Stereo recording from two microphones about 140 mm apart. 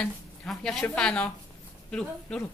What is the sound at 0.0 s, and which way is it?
A woman's voice, 5° left (ahead or behind).